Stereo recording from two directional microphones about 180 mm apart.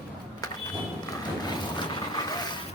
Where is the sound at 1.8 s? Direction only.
25° left (ahead or behind).